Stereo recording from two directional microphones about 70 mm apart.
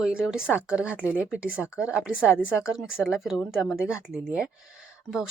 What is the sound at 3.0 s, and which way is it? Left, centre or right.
Speech, centre.